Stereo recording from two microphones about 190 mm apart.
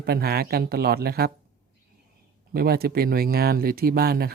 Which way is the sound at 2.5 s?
55° right (ahead or behind).